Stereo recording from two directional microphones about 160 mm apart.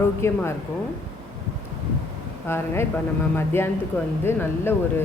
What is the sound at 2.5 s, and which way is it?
Speech, 15° left (ahead or behind).